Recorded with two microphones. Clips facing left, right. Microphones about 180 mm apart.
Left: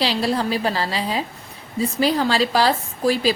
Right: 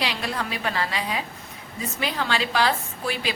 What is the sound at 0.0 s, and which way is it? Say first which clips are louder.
A woman's voice: left 7 dB; 30° left (ahead or behind).